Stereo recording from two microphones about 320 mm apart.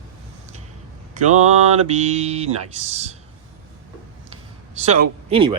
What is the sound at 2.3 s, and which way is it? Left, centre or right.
Speech, centre.